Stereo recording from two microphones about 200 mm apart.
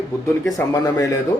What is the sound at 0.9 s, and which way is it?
Speech, 15° left (ahead or behind).